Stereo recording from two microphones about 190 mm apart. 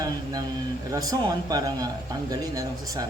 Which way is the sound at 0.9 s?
20° right (ahead or behind).